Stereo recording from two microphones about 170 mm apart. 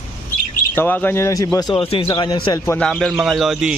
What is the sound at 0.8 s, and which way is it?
A man's voice, 10° left (ahead or behind).